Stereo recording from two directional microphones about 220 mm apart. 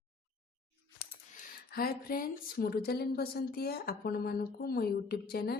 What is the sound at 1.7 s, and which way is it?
Speech, 40° left (ahead or behind).